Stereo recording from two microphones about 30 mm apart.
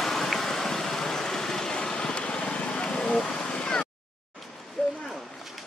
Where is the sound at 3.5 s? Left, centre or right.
Left.